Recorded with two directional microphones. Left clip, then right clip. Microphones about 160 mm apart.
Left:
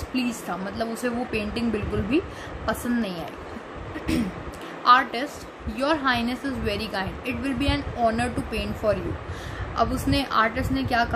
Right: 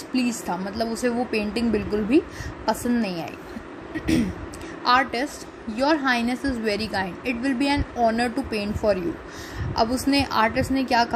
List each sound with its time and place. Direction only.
0.1 s a woman's voice: 30° right (ahead or behind)
4.8 s a woman's voice: 25° right (ahead or behind)